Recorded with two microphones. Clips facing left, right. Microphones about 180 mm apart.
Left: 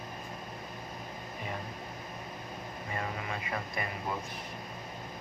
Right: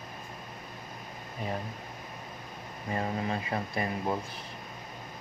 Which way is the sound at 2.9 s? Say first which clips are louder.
Right 6 dB; 30° right (ahead or behind).